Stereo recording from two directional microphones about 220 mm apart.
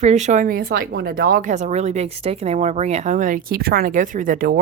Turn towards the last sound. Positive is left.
turn(degrees=-40)  # may be behind; listen again after turning